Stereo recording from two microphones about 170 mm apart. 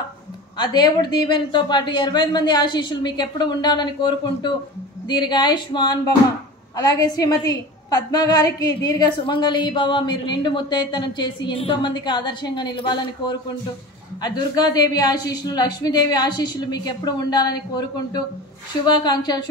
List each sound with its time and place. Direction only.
0.6 s a woman's voice: 25° left (ahead or behind)